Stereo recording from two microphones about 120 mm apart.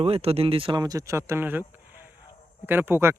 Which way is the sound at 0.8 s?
30° right (ahead or behind).